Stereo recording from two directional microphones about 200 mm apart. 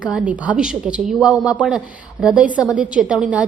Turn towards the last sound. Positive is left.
turn(degrees=-5)  # may be behind; listen again after turning